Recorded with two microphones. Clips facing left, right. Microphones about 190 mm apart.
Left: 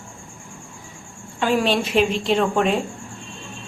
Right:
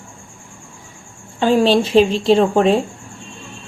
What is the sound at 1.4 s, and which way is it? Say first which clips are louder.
A woman's voice: right 6 dB; 30° right (ahead or behind).